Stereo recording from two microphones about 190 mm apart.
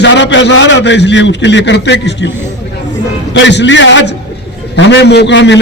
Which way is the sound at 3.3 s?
70° left (ahead or behind).